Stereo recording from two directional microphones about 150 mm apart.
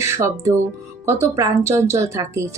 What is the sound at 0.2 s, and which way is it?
Speech, 20° right (ahead or behind).